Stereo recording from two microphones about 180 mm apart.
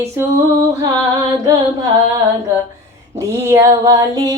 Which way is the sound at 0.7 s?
20° right (ahead or behind).